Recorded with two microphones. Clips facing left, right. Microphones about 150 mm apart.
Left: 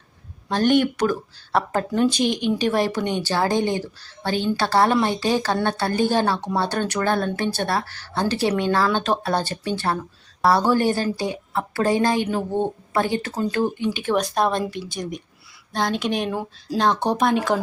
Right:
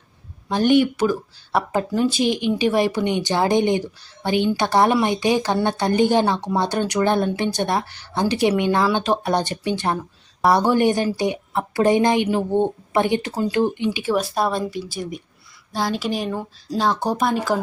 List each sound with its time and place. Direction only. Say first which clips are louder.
0.5 s speech: right 2 dB; 10° right (ahead or behind)